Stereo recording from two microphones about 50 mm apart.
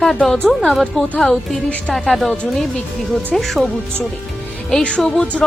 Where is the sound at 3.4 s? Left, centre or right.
Centre.